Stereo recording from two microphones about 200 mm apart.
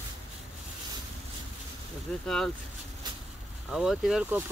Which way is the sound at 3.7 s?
Centre (ahead or behind).